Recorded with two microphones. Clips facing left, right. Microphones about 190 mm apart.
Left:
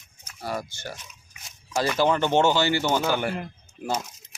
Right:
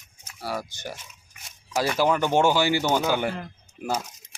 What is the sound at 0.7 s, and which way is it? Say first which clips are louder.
Speech: right 1 dB; 15° right (ahead or behind).